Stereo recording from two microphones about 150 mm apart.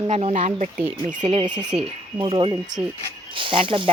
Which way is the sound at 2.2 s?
35° right (ahead or behind).